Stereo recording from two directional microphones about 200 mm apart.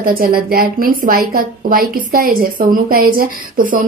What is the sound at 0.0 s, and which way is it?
A woman's voice, 45° right (ahead or behind).